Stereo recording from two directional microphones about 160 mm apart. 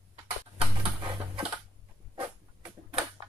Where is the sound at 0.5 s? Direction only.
35° right (ahead or behind).